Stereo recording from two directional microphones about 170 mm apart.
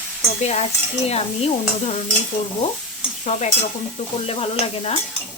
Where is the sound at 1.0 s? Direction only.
35° left (ahead or behind).